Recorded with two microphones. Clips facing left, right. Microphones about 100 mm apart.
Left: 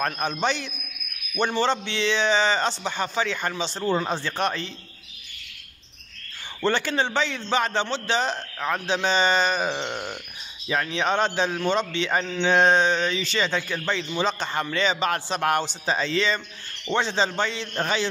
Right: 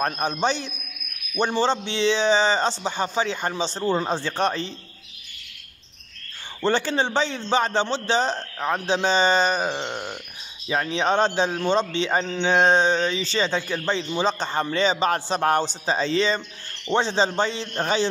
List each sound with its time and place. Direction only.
0.0 s speech: 30° right (ahead or behind)
3.8 s a man's voice: 20° right (ahead or behind)
4.4 s speech: 35° right (ahead or behind)
6.7 s speech: 35° right (ahead or behind)
9.7 s a sound: 10° right (ahead or behind)
10.7 s a man's voice: 30° right (ahead or behind)